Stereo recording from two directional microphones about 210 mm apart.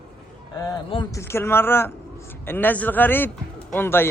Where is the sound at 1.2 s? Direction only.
10° left (ahead or behind).